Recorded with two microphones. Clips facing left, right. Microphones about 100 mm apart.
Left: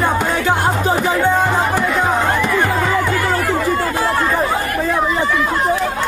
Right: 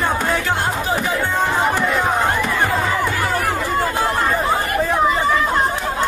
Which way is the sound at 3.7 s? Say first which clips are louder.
Left 1 dB; 20° right (ahead or behind).